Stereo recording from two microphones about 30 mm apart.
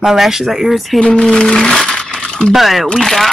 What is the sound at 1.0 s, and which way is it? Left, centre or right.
Speech, left.